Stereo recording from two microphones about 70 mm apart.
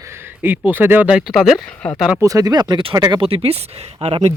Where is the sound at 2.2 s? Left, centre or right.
Right.